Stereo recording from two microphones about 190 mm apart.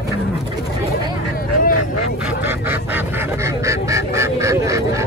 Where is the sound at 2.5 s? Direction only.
10° right (ahead or behind).